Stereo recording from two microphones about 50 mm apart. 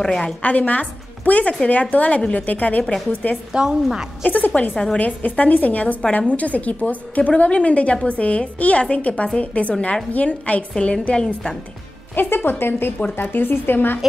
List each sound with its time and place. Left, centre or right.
0.2 s a woman's voice: left
2.8 s a woman's voice: centre
3.1 s a woman's voice: left
3.5 s a woman's voice: centre
4.2 s a woman's voice: left
12.4 s a woman's voice: left